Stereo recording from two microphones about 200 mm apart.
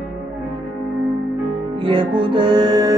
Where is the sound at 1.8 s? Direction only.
25° right (ahead or behind).